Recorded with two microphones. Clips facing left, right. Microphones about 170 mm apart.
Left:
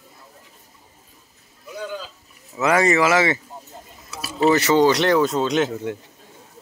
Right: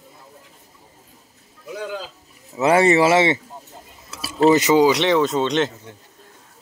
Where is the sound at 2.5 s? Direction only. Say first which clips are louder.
Right 3 dB; 30° right (ahead or behind).